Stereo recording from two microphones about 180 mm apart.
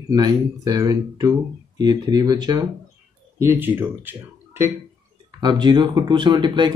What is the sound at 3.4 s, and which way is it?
Speech, 15° right (ahead or behind).